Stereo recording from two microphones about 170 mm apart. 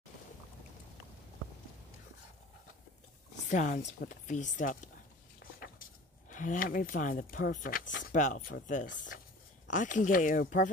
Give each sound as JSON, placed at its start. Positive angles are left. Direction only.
{"t": 3.4, "sound": "speech", "side_deg": 50}
{"t": 5.4, "sound": "a sound", "side_deg": 55}
{"t": 8.1, "sound": "speech", "side_deg": 50}